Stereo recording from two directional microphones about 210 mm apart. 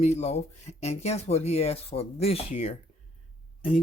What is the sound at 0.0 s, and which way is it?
Speech, 30° left (ahead or behind).